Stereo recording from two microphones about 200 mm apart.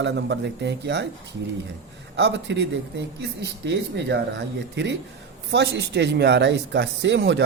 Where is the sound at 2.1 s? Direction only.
60° right (ahead or behind).